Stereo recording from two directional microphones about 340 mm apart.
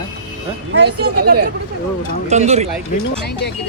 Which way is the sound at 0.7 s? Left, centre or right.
Right.